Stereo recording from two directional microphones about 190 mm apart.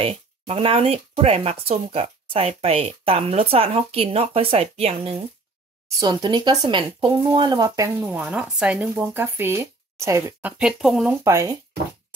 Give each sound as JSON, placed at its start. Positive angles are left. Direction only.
{"t": 0.0, "sound": "speech", "side_deg": -30}
{"t": 5.9, "sound": "speech", "side_deg": -20}
{"t": 10.6, "sound": "speech", "side_deg": 0}
{"t": 11.2, "sound": "speech", "side_deg": -15}